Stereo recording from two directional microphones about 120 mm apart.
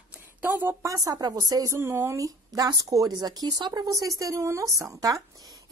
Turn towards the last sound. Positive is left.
turn(degrees=-30)  # may be behind; listen again after turning